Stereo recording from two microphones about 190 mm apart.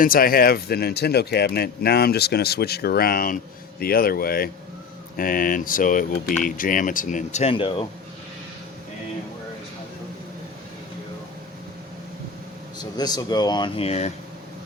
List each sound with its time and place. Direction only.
0.0 s speech: 50° left (ahead or behind)
7.5 s speech: 25° left (ahead or behind)
13.0 s speech: 20° left (ahead or behind)